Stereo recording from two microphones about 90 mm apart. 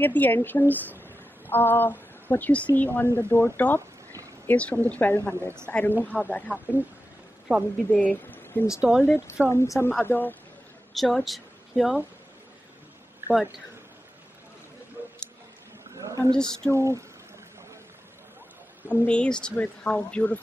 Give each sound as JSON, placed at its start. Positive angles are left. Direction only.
{"t": 0.0, "sound": "speech", "side_deg": 20}
{"t": 7.9, "sound": "speech", "side_deg": 15}
{"t": 10.9, "sound": "speech", "side_deg": 0}
{"t": 13.2, "sound": "a sound", "side_deg": -25}
{"t": 16.0, "sound": "a sound", "side_deg": -40}
{"t": 16.3, "sound": "speech", "side_deg": 10}
{"t": 16.7, "sound": "speech", "side_deg": -35}
{"t": 18.9, "sound": "speech", "side_deg": 15}